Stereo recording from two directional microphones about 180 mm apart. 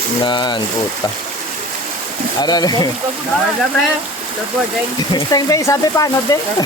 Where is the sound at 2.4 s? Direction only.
20° left (ahead or behind).